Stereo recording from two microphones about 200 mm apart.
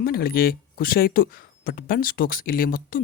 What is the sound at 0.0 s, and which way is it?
Speech, 50° left (ahead or behind).